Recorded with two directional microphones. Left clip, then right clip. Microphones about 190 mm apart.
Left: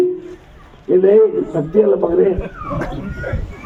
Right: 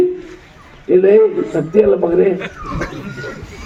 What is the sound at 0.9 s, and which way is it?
Speech, 50° right (ahead or behind).